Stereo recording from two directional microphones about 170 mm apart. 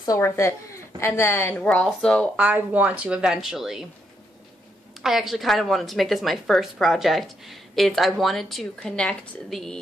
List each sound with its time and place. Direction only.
0.0 s a woman's voice: 20° left (ahead or behind)
2.3 s a woman's voice: 10° right (ahead or behind)
5.0 s a woman's voice: centre (ahead or behind)